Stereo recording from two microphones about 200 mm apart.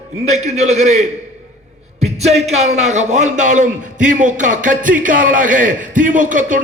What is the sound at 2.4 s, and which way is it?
A man's voice, 35° right (ahead or behind).